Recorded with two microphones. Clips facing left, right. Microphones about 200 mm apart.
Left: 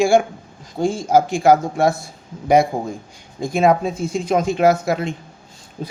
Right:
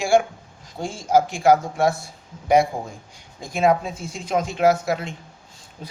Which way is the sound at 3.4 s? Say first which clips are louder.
Left 4 dB; 45° left (ahead or behind).